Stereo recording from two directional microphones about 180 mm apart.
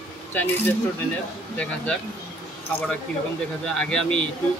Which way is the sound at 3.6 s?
5° left (ahead or behind).